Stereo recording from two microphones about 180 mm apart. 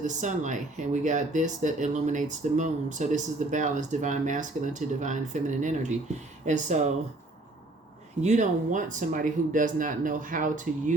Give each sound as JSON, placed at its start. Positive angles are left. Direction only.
{"t": 0.0, "sound": "speech", "side_deg": -45}
{"t": 8.2, "sound": "speech", "side_deg": -40}